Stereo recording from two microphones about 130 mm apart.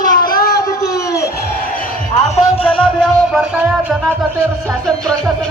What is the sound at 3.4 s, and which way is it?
Music, 10° right (ahead or behind).